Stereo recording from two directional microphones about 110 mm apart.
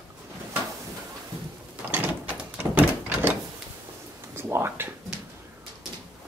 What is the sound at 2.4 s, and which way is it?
Door, 10° right (ahead or behind).